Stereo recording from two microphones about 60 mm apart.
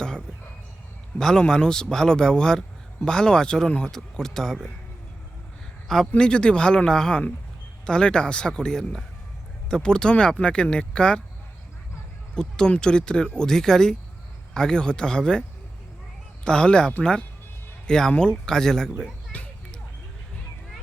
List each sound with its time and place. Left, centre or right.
1.2 s a man's voice: centre
6.1 s a man's voice: centre
12.3 s a man's voice: centre
19.3 s music: left